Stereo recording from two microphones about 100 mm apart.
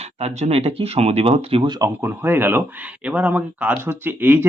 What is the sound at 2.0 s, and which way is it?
Speech, 20° right (ahead or behind).